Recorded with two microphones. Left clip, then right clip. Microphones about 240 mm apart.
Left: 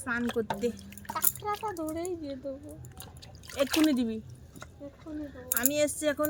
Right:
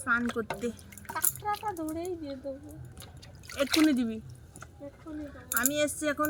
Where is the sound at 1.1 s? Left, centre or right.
Left.